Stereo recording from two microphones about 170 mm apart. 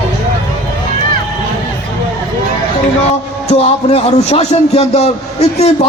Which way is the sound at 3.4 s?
35° left (ahead or behind).